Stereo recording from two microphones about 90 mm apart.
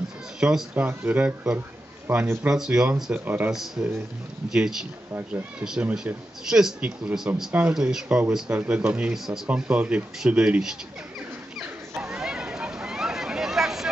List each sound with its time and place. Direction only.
0.4 s speech: 5° right (ahead or behind)
0.7 s a man's voice: 20° right (ahead or behind)
2.4 s speech: 5° right (ahead or behind)
3.3 s speech: 20° right (ahead or behind)
4.5 s speech: 5° right (ahead or behind)
9.5 s speech: 15° right (ahead or behind)
12.0 s a sound: 5° right (ahead or behind)